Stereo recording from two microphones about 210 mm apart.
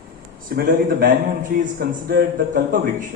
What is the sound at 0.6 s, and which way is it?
A man's voice, 40° right (ahead or behind).